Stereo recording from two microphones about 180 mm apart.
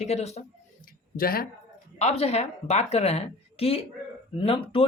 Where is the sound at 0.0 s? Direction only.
35° left (ahead or behind).